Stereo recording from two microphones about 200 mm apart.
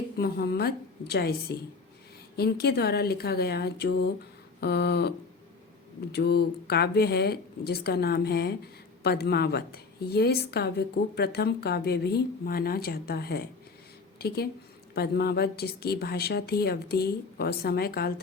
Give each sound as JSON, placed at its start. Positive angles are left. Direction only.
{"t": 0.2, "sound": "a woman's voice", "side_deg": 50}
{"t": 4.6, "sound": "a sound", "side_deg": 55}
{"t": 6.1, "sound": "a woman's voice", "side_deg": 55}